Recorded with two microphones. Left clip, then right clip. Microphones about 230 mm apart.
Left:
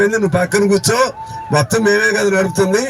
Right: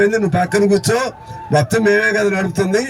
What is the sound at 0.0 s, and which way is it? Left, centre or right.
A man's voice, centre.